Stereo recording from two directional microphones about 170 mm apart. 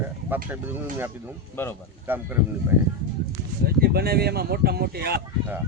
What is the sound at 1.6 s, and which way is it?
Speech, 15° left (ahead or behind).